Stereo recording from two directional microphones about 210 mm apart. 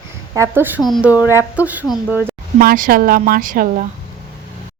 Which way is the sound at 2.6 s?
45° right (ahead or behind).